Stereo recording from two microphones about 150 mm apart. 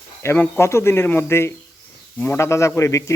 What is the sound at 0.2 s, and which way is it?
Speech, 15° left (ahead or behind).